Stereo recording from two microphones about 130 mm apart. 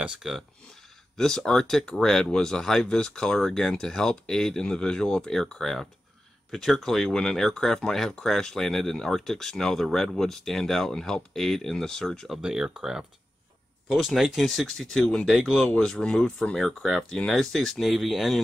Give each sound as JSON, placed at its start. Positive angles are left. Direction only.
{"t": 0.0, "sound": "speech", "side_deg": -5}